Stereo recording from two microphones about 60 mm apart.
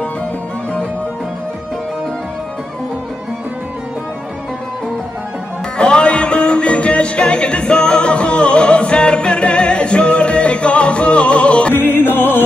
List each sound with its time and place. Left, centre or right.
5.8 s music: centre
11.7 s music: left